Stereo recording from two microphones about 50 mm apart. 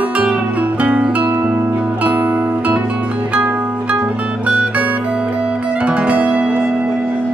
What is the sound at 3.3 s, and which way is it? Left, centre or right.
Music, right.